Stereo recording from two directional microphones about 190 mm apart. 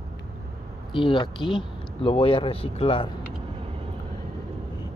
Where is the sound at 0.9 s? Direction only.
25° left (ahead or behind).